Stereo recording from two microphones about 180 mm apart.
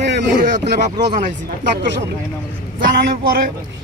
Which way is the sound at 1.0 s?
70° right (ahead or behind).